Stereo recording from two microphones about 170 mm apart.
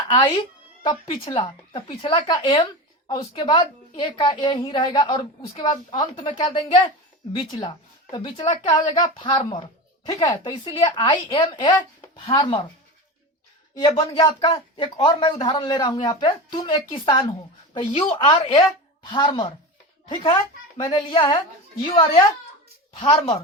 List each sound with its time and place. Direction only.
0.1 s a woman's voice: 25° left (ahead or behind)
11.7 s chopping: 20° left (ahead or behind)
12.3 s a woman's voice: 25° left (ahead or behind)
13.7 s a woman's voice: 35° left (ahead or behind)